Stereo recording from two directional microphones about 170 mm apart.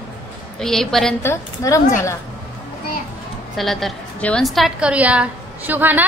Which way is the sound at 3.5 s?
Centre (ahead or behind).